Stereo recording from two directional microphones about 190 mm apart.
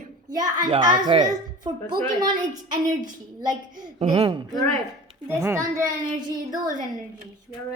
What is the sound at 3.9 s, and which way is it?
Speech, 30° right (ahead or behind).